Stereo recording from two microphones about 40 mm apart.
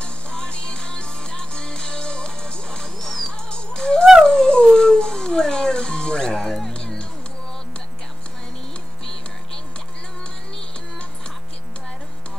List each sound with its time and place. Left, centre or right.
0.0 s music: left
4.3 s dog: left
6.7 s music: left